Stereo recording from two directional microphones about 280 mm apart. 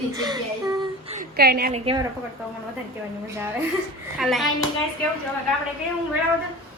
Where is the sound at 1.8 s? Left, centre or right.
Centre.